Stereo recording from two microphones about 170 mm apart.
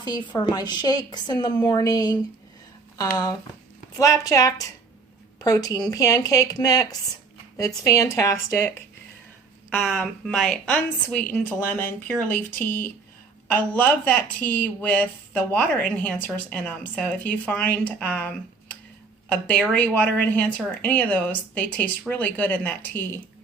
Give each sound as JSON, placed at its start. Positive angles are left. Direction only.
{"t": 0.0, "sound": "speech", "side_deg": 25}
{"t": 9.6, "sound": "speech", "side_deg": 0}